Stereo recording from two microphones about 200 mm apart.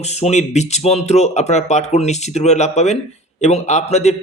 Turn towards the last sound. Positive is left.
turn(degrees=35)  # may be behind; listen again after turning